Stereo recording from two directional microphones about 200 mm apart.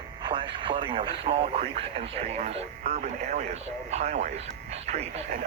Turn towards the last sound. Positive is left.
turn(degrees=-35)  # may be behind; listen again after turning